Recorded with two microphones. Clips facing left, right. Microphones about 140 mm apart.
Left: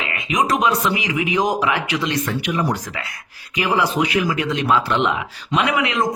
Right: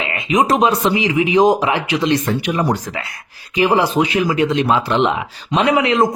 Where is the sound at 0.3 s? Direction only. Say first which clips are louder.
Right 4 dB; 30° right (ahead or behind).